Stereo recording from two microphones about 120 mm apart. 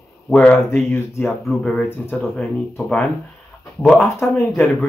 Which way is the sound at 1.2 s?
Centre (ahead or behind).